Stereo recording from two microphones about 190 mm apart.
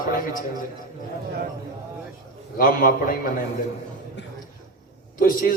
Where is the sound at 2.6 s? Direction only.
50° left (ahead or behind).